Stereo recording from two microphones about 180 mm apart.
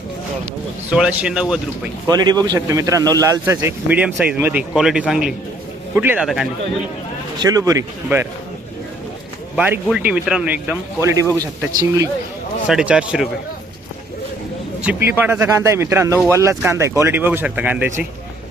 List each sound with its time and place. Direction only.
0.9 s speech: 5° right (ahead or behind)
2.0 s a man's voice: 20° right (ahead or behind); by 6.5 s 5° right (ahead or behind)
7.3 s a man's voice: 20° right (ahead or behind)
9.6 s a man's voice: 10° right (ahead or behind)
12.6 s speech: 5° right (ahead or behind)
14.8 s a man's voice: 10° right (ahead or behind)